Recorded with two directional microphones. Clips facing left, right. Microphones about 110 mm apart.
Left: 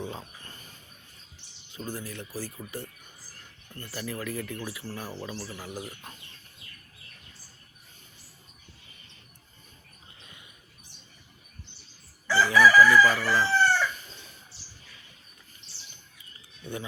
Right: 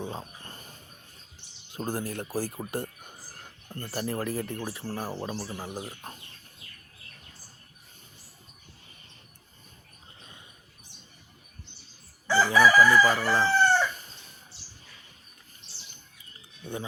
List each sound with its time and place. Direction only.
0.1 s a sound: 30° right (ahead or behind)
1.7 s speech: 50° right (ahead or behind); by 6.2 s 30° right (ahead or behind)
12.4 s chicken: 30° right (ahead or behind)